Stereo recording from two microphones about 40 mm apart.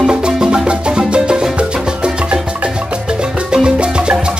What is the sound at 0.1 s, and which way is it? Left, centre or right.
Music, right.